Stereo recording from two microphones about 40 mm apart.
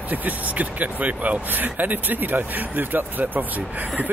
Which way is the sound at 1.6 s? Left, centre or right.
Right.